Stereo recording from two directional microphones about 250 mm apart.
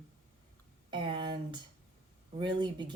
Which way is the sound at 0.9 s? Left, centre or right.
Centre.